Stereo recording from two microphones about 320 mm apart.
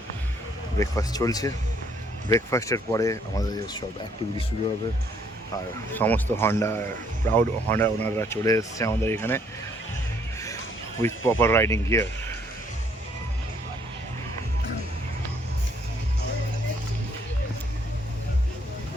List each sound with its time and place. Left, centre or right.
0.8 s speech: centre
5.9 s speech: centre
10.4 s speech: centre